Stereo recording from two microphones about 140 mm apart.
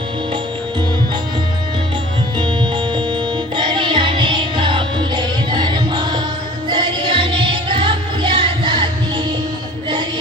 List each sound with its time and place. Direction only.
2.4 s music: 35° right (ahead or behind)